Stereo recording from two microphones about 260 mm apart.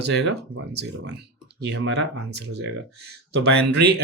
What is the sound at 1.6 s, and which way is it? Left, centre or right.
Speech, right.